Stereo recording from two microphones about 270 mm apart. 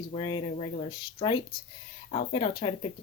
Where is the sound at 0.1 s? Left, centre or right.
Centre.